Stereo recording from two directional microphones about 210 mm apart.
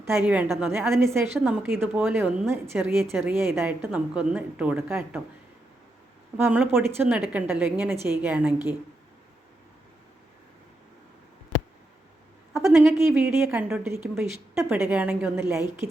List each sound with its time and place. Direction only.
0.1 s a woman's voice: 10° right (ahead or behind)
6.3 s a woman's voice: 10° right (ahead or behind)
12.7 s a woman's voice: 5° right (ahead or behind)